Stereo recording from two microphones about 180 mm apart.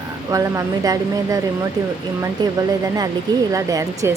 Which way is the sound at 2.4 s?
20° right (ahead or behind).